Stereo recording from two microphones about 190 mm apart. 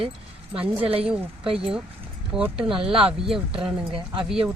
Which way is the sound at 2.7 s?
30° right (ahead or behind).